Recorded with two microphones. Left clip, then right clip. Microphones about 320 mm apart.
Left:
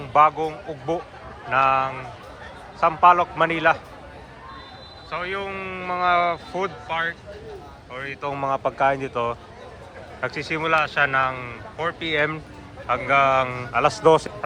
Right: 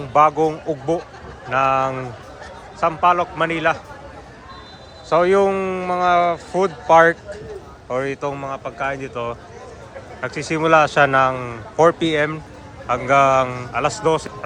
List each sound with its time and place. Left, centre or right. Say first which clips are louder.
0.1 s speech: right 3 dB; centre
5.1 s speech: right 13 dB; centre
7.9 s speech: right 7 dB; centre